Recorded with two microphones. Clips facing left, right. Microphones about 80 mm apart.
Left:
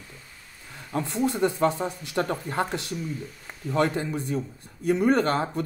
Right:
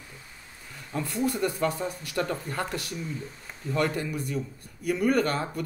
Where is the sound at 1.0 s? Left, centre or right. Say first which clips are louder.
Left 3 dB; left.